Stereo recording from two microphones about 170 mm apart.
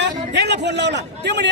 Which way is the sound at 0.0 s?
90° right.